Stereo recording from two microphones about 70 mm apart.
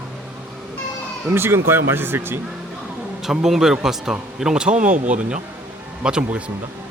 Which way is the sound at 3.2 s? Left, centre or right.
Centre.